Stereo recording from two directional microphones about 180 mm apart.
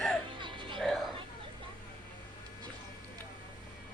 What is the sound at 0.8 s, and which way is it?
Music, centre (ahead or behind).